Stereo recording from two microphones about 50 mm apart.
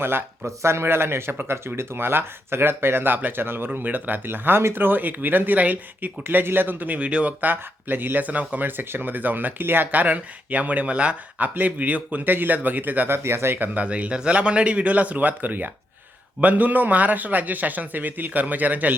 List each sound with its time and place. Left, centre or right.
0.0 s speech: right
0.4 s speech: right
3.8 s speech: right
7.4 s speech: right
13.2 s speech: right
13.6 s speech: right